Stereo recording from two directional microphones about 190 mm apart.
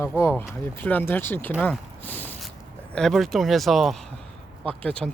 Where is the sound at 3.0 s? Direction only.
Centre (ahead or behind).